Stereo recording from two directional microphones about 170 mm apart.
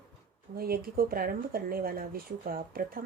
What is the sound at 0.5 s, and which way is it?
Speech, 60° right (ahead or behind).